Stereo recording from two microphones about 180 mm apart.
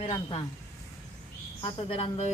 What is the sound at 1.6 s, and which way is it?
Speech, 30° left (ahead or behind).